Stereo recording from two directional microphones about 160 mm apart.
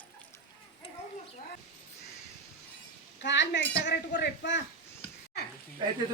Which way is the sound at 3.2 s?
90° left.